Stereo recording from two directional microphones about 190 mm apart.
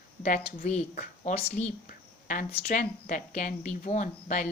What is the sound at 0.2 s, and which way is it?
A woman's voice, 40° left (ahead or behind).